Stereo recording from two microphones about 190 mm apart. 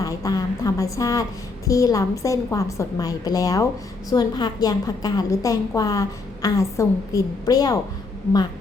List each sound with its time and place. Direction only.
0.0 s a woman's voice: 20° left (ahead or behind)